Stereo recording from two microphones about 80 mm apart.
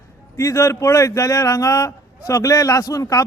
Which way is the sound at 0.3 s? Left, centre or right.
Left.